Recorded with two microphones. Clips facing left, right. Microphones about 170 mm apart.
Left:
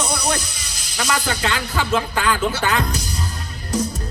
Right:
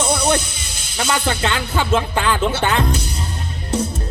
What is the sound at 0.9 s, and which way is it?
A man's voice, 30° right (ahead or behind).